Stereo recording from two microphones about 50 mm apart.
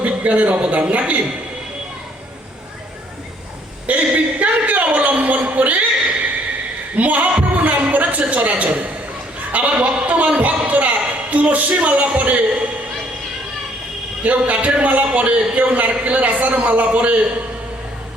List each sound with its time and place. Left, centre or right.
0.0 s speech: right
3.8 s a sound: right
9.5 s a man's voice: right
14.3 s a man's voice: right